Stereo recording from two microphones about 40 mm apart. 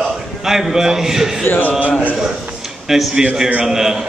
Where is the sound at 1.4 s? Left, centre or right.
Left.